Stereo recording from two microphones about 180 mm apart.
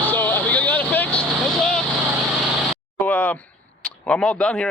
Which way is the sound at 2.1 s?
Centre (ahead or behind).